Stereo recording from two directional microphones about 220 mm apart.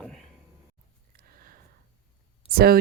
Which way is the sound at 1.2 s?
40° right (ahead or behind).